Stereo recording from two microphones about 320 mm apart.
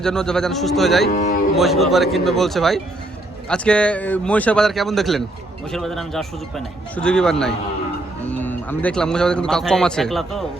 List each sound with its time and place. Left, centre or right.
0.0 s speech: centre
1.0 s speech: left
1.5 s speech: centre